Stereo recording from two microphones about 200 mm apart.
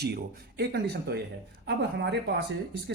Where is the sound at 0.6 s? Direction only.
55° right (ahead or behind).